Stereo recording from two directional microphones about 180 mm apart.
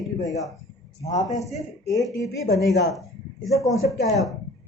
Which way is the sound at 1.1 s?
20° left (ahead or behind).